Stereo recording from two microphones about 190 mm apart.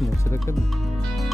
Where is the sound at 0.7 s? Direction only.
Centre (ahead or behind).